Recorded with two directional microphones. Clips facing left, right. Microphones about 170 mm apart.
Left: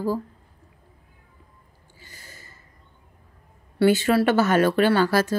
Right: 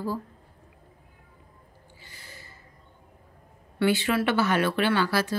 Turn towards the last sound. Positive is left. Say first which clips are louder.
# left 5 dB
turn(degrees=45)  # may be behind; listen again after turning